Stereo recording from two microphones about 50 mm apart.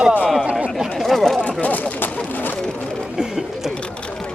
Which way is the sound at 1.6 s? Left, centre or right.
Left.